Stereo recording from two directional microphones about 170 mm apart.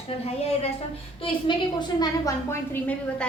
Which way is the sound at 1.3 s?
25° left (ahead or behind).